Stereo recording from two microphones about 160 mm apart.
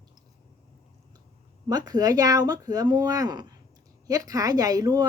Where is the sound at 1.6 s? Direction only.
25° right (ahead or behind).